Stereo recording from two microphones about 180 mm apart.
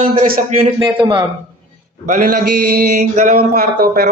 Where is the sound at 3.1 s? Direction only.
40° right (ahead or behind).